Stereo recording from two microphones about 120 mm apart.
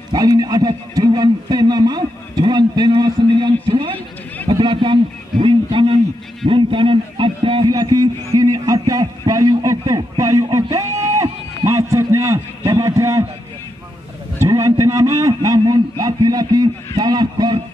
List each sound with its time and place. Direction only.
0.1 s a man's voice: 30° right (ahead or behind)
7.6 s a man's voice: 30° right (ahead or behind)
14.4 s a man's voice: 25° right (ahead or behind)